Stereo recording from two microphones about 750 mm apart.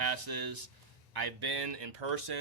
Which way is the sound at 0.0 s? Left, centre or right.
Right.